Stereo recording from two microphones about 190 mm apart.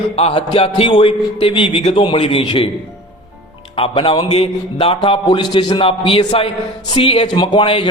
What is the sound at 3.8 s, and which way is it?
A man's voice, 30° left (ahead or behind).